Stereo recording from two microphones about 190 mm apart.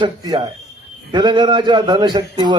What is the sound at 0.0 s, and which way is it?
A man's voice, 25° right (ahead or behind).